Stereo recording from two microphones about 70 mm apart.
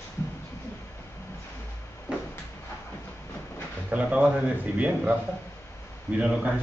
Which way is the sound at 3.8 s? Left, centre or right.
Centre.